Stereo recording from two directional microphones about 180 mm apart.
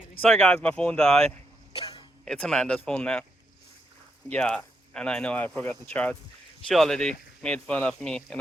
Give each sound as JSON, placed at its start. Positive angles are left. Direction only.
{"t": 0.2, "sound": "speech", "side_deg": 5}
{"t": 1.7, "sound": "a sound", "side_deg": 30}
{"t": 2.2, "sound": "speech", "side_deg": 5}
{"t": 4.3, "sound": "speech", "side_deg": 5}